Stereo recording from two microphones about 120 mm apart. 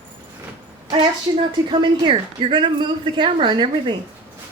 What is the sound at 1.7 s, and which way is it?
Speech, 45° right (ahead or behind).